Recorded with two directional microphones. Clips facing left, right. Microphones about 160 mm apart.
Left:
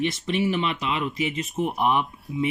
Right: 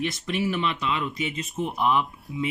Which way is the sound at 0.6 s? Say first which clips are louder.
Left 1 dB; 30° left (ahead or behind).